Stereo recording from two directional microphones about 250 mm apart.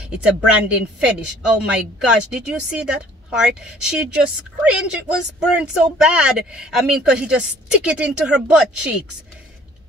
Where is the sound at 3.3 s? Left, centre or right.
Centre.